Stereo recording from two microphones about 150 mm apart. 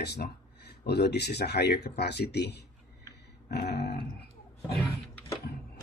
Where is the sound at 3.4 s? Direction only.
90° left.